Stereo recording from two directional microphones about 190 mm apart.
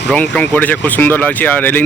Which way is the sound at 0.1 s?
5° left (ahead or behind).